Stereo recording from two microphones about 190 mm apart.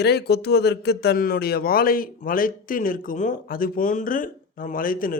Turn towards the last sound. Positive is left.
turn(degrees=45)  # may be behind; listen again after turning